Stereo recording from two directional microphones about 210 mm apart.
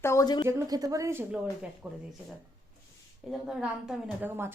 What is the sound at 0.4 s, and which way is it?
A woman's voice, 15° right (ahead or behind).